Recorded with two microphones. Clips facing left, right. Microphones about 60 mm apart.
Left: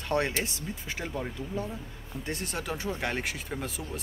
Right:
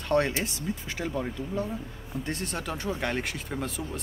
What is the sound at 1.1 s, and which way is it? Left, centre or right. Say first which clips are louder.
Speech: right 3 dB; centre.